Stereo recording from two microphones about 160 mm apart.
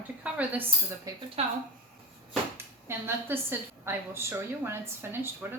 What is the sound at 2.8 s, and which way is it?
A woman's voice, 15° right (ahead or behind).